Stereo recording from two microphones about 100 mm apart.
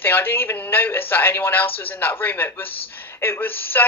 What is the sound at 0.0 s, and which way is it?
Speech, 20° left (ahead or behind).